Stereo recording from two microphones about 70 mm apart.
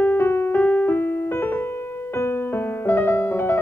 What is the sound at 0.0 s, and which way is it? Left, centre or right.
Music, left.